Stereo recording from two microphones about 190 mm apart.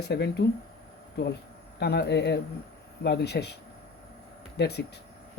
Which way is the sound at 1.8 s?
60° left (ahead or behind).